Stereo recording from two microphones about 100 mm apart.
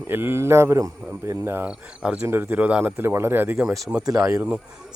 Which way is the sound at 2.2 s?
20° right (ahead or behind).